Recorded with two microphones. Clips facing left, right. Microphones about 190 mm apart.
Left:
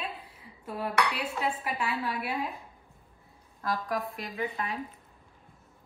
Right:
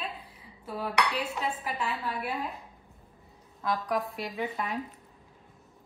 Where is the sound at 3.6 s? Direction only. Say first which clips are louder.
Right 2 dB; centre (ahead or behind).